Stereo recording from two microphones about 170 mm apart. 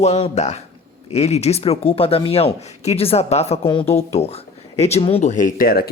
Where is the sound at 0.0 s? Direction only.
40° left (ahead or behind).